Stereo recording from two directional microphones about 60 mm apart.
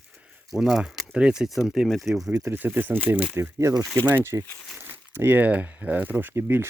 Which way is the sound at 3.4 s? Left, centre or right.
Right.